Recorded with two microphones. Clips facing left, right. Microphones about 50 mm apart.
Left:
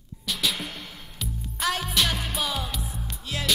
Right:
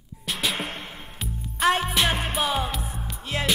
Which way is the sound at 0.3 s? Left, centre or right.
Right.